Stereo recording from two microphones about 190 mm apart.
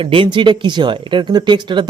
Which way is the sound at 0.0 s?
25° right (ahead or behind).